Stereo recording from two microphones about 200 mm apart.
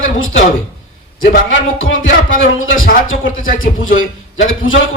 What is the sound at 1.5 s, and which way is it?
Music, 80° left.